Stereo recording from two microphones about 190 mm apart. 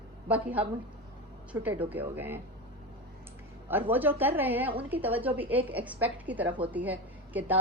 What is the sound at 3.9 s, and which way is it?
A woman's voice, 10° right (ahead or behind).